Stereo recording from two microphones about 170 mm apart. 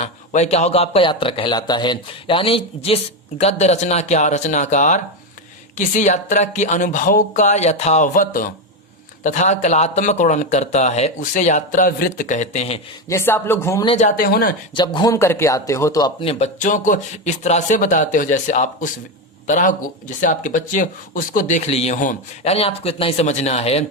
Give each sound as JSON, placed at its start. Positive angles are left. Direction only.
{"t": 0.0, "sound": "a man's voice", "side_deg": 40}
{"t": 13.1, "sound": "speech", "side_deg": 15}
{"t": 13.9, "sound": "speech", "side_deg": 45}
{"t": 14.3, "sound": "speech", "side_deg": 60}
{"t": 14.8, "sound": "a man's voice", "side_deg": 25}